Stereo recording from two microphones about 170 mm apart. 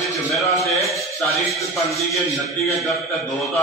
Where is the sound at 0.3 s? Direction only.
Centre (ahead or behind).